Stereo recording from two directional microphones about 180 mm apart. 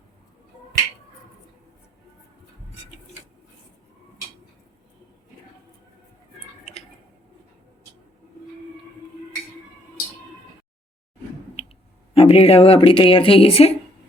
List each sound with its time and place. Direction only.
12.1 s speech: 35° left (ahead or behind)